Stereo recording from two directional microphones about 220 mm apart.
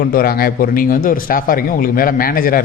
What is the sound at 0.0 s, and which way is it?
A man's voice, 40° left (ahead or behind).